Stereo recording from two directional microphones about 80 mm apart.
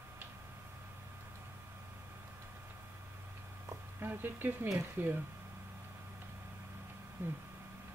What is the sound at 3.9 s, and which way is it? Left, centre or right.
Speech, right.